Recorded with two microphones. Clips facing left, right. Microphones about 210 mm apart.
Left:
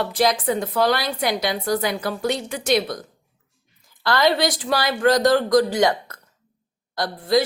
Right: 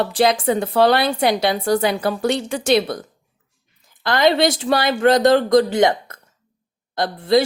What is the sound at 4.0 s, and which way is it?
Speech, 20° right (ahead or behind).